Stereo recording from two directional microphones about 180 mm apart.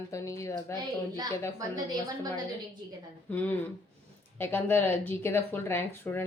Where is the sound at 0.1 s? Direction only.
15° left (ahead or behind).